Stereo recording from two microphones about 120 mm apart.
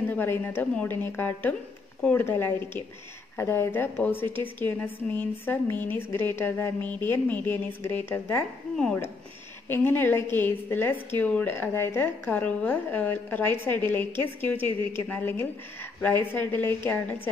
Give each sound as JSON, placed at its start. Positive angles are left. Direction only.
{"t": 0.1, "sound": "a woman's voice", "side_deg": 15}
{"t": 9.7, "sound": "a woman's voice", "side_deg": 15}